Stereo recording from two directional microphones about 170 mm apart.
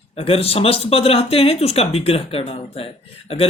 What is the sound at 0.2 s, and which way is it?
Speech, 35° left (ahead or behind).